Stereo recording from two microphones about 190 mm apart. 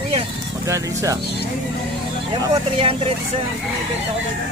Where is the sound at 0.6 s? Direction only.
15° right (ahead or behind).